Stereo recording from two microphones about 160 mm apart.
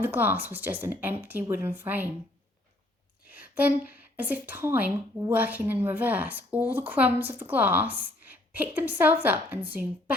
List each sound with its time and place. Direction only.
0.0 s a woman's voice: 10° right (ahead or behind)
3.2 s a woman's voice: 10° right (ahead or behind)